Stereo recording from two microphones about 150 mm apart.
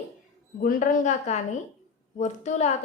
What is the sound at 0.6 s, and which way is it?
A woman's voice, 65° left (ahead or behind).